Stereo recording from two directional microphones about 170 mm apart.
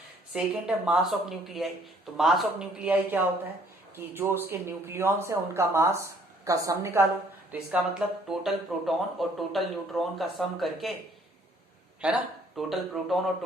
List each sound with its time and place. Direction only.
0.3 s a woman's voice: 5° right (ahead or behind)
12.0 s speech: 5° right (ahead or behind)